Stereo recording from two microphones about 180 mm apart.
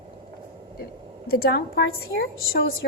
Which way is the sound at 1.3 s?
60° left (ahead or behind).